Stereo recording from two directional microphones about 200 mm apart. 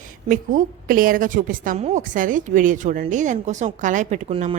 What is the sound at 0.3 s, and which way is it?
A woman's voice, 45° right (ahead or behind).